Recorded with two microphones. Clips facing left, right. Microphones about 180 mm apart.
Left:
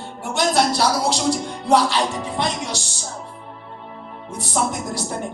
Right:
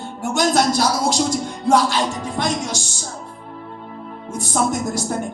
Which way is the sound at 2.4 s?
45° right (ahead or behind).